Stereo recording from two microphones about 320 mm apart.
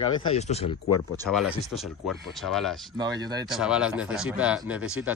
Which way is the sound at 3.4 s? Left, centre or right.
Centre.